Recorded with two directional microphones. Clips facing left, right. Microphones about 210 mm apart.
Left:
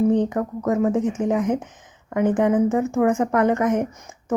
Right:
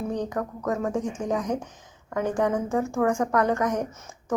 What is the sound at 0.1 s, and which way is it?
Speech, 20° left (ahead or behind).